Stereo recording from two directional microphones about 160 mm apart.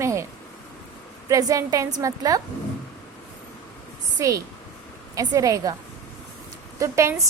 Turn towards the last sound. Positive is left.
turn(degrees=-20)  # may be behind; listen again after turning